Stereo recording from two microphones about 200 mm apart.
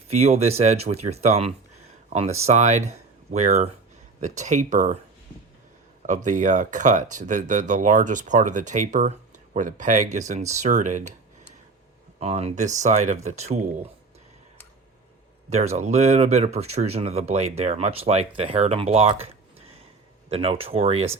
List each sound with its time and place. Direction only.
0.1 s speech: 30° right (ahead or behind)
6.2 s speech: 40° right (ahead or behind)
12.2 s speech: 30° right (ahead or behind)
15.4 s speech: 35° right (ahead or behind)